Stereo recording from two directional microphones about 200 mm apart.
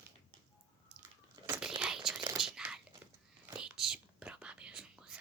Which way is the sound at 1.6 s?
5° right (ahead or behind).